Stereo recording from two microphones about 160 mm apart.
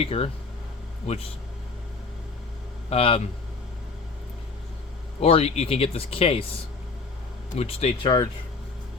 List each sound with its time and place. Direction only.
0.0 s speech: 40° left (ahead or behind)
2.9 s speech: 35° left (ahead or behind)
5.2 s speech: 40° left (ahead or behind)
7.5 s speech: 40° left (ahead or behind)
8.0 s speech: 30° left (ahead or behind)